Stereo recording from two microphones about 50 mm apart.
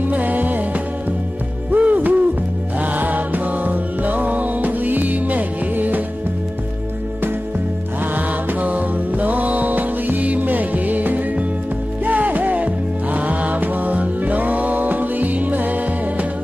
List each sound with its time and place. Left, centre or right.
0.0 s music: right
8.1 s music: right